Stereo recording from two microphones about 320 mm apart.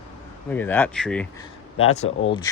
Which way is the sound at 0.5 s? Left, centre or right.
Centre.